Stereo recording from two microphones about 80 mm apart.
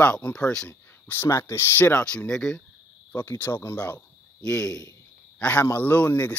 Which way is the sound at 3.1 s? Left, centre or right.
Left.